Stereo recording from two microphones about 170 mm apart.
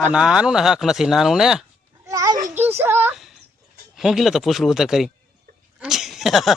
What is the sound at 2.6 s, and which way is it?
Whimper, 10° right (ahead or behind).